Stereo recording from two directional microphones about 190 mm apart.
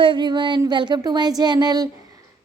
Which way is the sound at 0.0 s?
25° right (ahead or behind).